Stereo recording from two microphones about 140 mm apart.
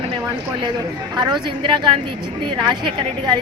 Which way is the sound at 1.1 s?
30° right (ahead or behind).